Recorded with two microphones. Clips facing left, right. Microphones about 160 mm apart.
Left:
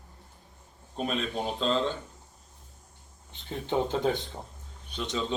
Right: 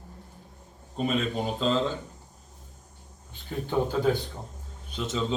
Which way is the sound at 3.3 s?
20° left (ahead or behind).